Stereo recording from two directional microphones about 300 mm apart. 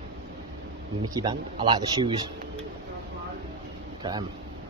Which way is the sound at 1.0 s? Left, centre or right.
Centre.